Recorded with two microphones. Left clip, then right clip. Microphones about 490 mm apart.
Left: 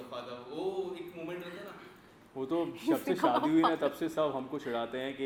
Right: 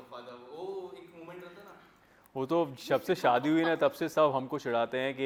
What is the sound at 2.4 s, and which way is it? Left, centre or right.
A man's voice, right.